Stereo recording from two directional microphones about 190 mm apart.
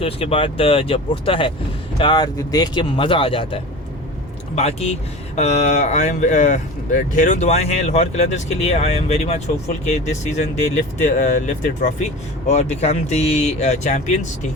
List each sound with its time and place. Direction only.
0.0 s speech: 30° left (ahead or behind)